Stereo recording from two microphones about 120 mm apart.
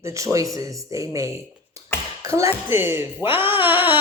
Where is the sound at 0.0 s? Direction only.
25° right (ahead or behind).